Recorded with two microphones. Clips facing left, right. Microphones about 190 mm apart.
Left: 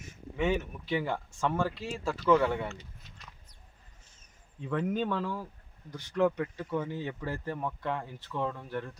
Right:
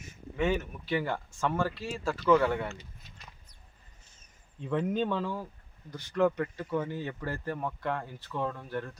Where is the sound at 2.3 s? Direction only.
5° right (ahead or behind).